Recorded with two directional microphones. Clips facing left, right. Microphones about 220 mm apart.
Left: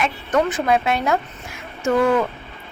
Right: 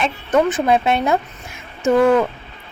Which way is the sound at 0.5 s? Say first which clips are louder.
Right 3 dB; 25° right (ahead or behind).